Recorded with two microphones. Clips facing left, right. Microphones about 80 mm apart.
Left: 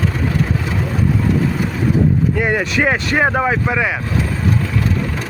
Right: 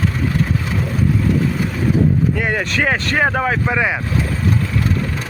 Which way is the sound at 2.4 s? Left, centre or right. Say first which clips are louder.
Left 2 dB; centre.